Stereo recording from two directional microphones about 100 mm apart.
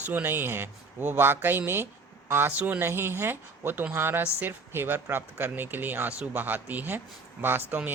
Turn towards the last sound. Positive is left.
turn(degrees=-20)  # may be behind; listen again after turning